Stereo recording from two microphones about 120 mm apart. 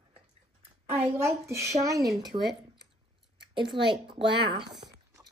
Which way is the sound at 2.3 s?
50° right (ahead or behind).